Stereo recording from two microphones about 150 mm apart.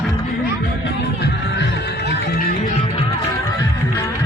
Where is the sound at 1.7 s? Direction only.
90° left.